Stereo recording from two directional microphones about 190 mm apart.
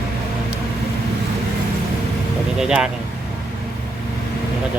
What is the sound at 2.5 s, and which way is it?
Speech, 5° right (ahead or behind).